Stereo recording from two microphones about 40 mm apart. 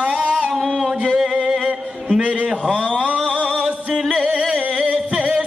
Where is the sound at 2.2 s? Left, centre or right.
Right.